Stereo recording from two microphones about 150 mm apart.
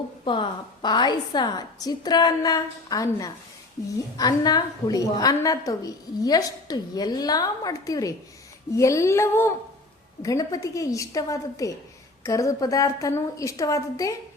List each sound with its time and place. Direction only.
0.3 s a woman's voice: 30° left (ahead or behind)